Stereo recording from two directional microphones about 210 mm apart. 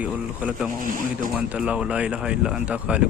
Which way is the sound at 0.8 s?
40° right (ahead or behind).